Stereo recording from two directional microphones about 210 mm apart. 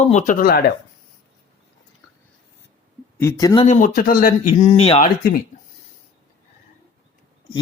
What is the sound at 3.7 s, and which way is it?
Speech, 40° left (ahead or behind).